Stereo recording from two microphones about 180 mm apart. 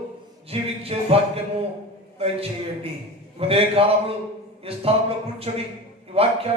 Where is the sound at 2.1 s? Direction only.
35° right (ahead or behind).